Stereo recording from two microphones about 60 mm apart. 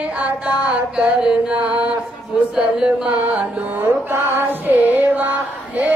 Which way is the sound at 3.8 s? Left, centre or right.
Right.